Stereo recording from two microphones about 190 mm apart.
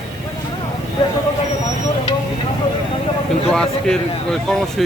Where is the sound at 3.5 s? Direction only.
5° left (ahead or behind).